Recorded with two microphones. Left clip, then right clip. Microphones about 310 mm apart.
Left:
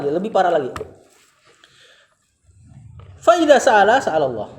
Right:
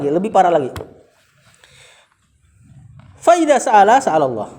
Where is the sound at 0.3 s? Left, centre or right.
Right.